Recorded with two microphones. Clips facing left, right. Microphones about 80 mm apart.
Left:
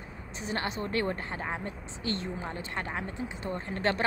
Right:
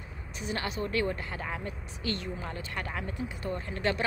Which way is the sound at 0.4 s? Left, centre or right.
Left.